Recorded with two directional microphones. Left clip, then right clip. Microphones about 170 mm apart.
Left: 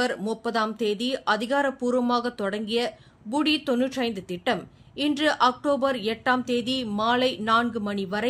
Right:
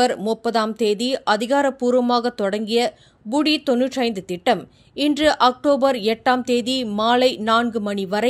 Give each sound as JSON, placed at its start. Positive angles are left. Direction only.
{"t": 0.0, "sound": "speech", "side_deg": -40}